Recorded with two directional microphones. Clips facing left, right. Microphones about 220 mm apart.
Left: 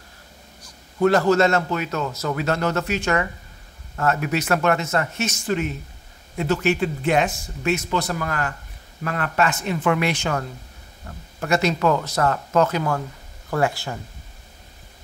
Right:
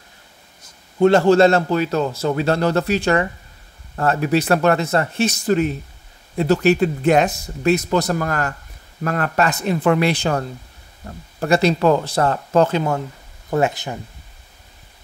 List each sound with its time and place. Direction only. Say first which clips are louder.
0.6 s a man's voice: right 4 dB; 25° right (ahead or behind)